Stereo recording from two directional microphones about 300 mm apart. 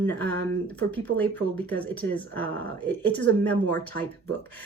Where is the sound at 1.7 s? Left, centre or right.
Centre.